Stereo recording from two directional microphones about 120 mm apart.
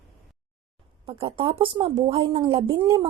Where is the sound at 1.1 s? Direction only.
55° right (ahead or behind).